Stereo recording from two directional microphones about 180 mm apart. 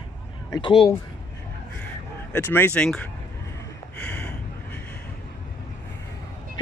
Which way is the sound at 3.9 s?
5° left (ahead or behind).